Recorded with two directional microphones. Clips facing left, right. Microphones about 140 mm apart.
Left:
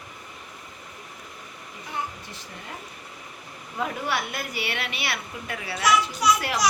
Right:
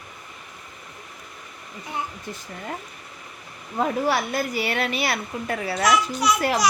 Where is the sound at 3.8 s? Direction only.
40° right (ahead or behind).